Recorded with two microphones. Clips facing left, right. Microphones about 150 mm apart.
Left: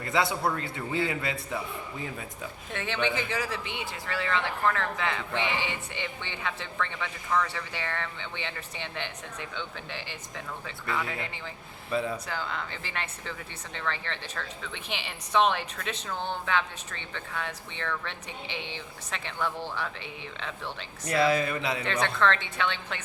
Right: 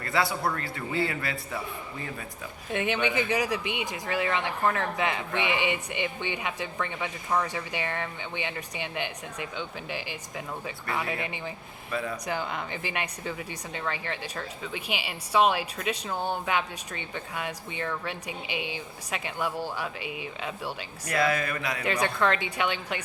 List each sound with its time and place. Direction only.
0.0 s a man's voice: 20° left (ahead or behind)
2.7 s speech: 15° right (ahead or behind)
11.9 s speech: 25° left (ahead or behind)
12.2 s speech: 15° right (ahead or behind)
21.1 s a man's voice: 30° left (ahead or behind)
21.8 s speech: 10° right (ahead or behind)